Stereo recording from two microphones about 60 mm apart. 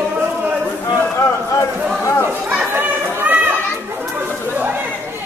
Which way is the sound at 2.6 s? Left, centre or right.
Right.